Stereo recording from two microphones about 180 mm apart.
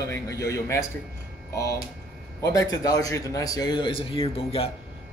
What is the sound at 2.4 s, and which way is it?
A man's voice, 20° left (ahead or behind).